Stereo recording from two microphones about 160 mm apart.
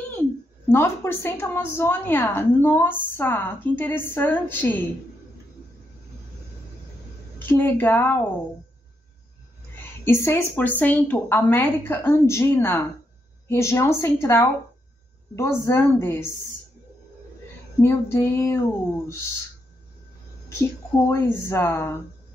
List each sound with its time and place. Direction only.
0.1 s a woman's voice: 15° left (ahead or behind)
7.3 s a woman's voice: 10° left (ahead or behind)
10.0 s a woman's voice: 15° left (ahead or behind)
17.8 s a woman's voice: 15° left (ahead or behind)
21.1 s a woman's voice: 15° left (ahead or behind)